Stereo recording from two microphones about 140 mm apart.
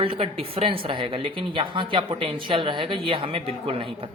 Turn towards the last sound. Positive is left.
turn(degrees=-40)  # may be behind; listen again after turning